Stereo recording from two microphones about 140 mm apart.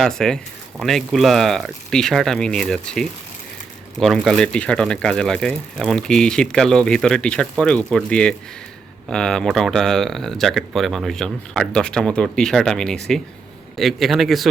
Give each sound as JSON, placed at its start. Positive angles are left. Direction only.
{"t": 0.0, "sound": "speech", "side_deg": 5}